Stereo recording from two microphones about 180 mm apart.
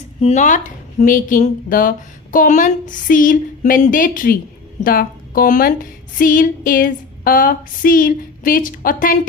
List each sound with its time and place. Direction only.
0.2 s a woman's voice: 40° left (ahead or behind)